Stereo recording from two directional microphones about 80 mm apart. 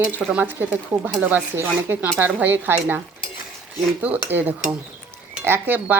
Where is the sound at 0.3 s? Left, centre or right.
Right.